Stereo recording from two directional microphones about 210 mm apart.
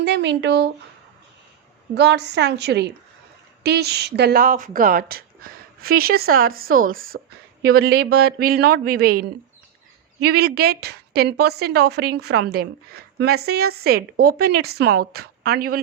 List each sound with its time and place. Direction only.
0.0 s speech: 55° right (ahead or behind)
2.0 s a woman's voice: 55° right (ahead or behind)
10.2 s a woman's voice: 50° right (ahead or behind)